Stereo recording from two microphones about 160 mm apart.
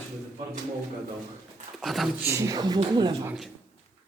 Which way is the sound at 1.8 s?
Centre (ahead or behind).